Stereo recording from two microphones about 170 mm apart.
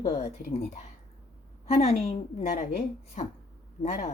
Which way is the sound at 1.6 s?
40° left (ahead or behind).